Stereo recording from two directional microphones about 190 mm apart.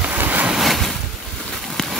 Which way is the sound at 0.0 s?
10° right (ahead or behind).